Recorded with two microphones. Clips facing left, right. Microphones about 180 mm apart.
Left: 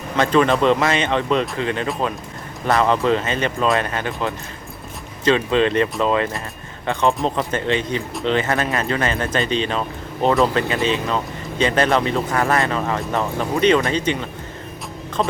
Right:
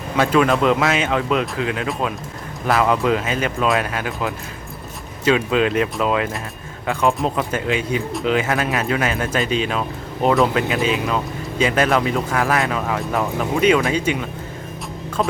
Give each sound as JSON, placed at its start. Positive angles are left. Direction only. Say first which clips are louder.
{"t": 0.2, "sound": "speech", "louder": "even", "side_deg": -5}